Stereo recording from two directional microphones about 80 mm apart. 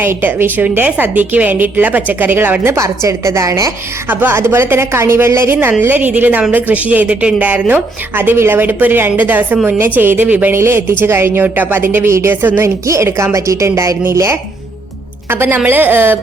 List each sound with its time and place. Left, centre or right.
0.0 s a woman's voice: right
2.7 s a woman's voice: right
4.1 s a woman's voice: right
12.6 s a woman's voice: right